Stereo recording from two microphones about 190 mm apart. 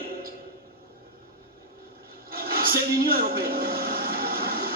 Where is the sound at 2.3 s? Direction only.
50° right (ahead or behind).